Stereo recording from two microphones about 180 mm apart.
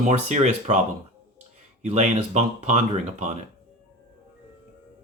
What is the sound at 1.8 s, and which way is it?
Speech, 40° right (ahead or behind).